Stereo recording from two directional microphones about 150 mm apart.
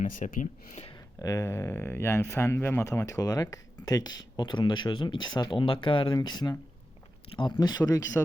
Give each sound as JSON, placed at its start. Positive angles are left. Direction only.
{"t": 0.0, "sound": "speech", "side_deg": 60}
{"t": 0.9, "sound": "speech", "side_deg": 25}